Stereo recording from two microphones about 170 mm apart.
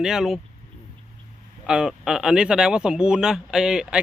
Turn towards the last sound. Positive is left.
turn(degrees=-5)  # may be behind; listen again after turning